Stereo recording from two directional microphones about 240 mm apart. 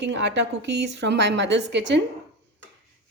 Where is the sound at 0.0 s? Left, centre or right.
Right.